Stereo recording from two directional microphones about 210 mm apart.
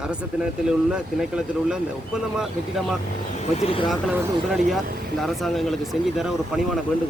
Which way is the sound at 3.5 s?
25° left (ahead or behind).